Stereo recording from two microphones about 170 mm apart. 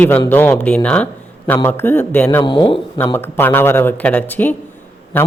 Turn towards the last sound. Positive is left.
turn(degrees=10)  # may be behind; listen again after turning